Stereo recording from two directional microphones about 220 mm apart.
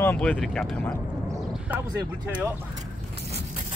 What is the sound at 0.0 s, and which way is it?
Speech, 5° left (ahead or behind).